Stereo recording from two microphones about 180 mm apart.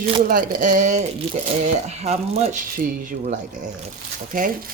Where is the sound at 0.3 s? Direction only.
50° right (ahead or behind).